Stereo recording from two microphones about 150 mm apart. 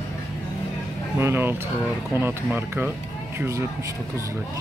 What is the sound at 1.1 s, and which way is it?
Speech, 15° right (ahead or behind).